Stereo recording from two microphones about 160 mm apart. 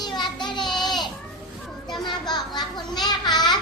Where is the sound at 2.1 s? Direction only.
25° left (ahead or behind).